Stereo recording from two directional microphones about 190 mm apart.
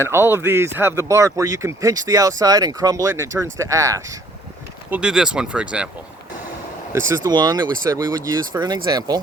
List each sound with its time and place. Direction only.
0.1 s speech: 10° right (ahead or behind)
4.9 s speech: 5° right (ahead or behind)
7.1 s speech: 20° right (ahead or behind)